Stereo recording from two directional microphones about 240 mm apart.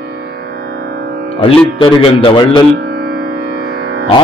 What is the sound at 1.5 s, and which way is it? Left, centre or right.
Speech, left.